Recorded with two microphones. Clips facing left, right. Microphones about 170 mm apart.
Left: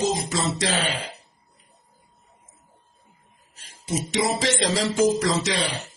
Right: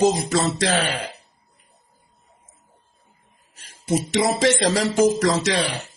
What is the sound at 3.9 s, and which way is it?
Speech, 60° right (ahead or behind).